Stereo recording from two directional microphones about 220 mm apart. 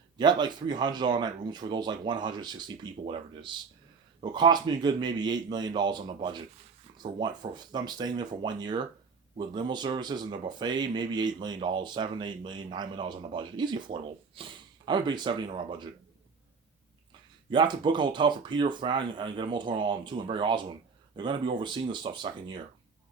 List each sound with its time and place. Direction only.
0.2 s speech: 20° right (ahead or behind)
17.5 s speech: 20° right (ahead or behind)